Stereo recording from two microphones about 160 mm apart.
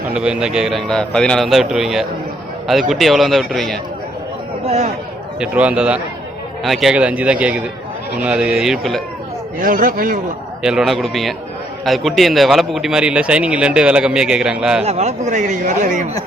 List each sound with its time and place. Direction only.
0.1 s speech: 5° right (ahead or behind)
4.6 s speech: 45° right (ahead or behind)
5.4 s a man's voice: 5° right (ahead or behind)
9.6 s speech: 60° right (ahead or behind)
10.6 s speech: 5° right (ahead or behind)
14.8 s speech: 45° right (ahead or behind)